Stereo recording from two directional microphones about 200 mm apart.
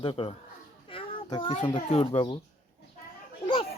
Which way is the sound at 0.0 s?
25° left (ahead or behind).